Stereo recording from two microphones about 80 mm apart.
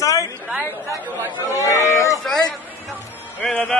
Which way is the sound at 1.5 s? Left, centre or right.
Left.